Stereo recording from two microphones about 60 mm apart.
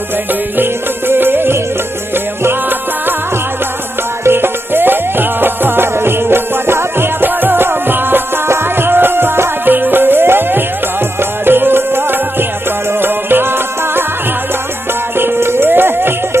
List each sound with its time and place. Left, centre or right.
0.3 s music: right
4.2 s music: right
15.1 s music: right